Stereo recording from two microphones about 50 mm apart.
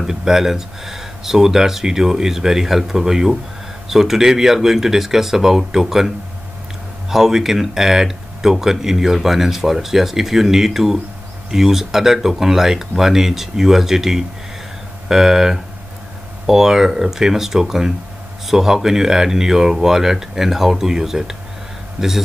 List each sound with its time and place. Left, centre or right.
0.0 s speech: centre